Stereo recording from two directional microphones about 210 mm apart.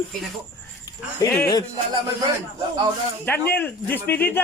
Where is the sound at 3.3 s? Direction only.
10° left (ahead or behind).